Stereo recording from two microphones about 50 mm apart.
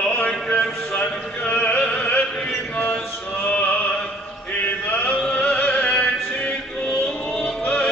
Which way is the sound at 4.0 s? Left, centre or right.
Centre.